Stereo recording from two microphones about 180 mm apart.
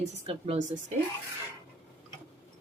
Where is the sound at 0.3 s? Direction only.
35° right (ahead or behind).